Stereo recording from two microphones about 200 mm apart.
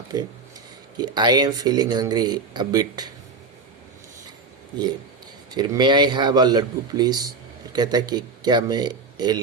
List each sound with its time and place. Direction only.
0.1 s speech: 20° right (ahead or behind)
5.5 s speech: 20° right (ahead or behind)